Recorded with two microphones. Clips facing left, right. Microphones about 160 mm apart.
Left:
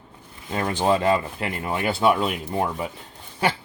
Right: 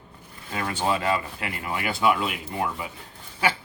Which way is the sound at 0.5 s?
35° left (ahead or behind).